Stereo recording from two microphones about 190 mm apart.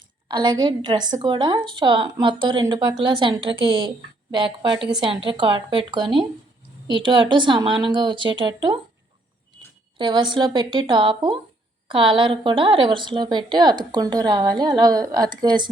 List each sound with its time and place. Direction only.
0.3 s a woman's voice: 25° right (ahead or behind)
10.0 s a woman's voice: 25° right (ahead or behind)